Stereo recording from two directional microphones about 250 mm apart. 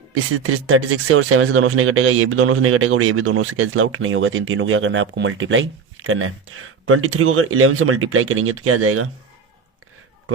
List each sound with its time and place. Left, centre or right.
0.1 s speech: right